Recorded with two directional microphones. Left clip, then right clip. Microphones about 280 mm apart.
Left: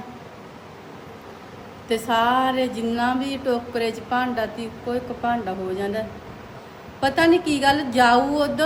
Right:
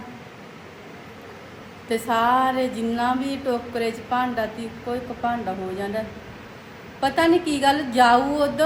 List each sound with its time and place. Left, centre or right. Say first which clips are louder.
1.9 s a woman's voice: even; centre
7.0 s a woman's voice: left 1 dB; centre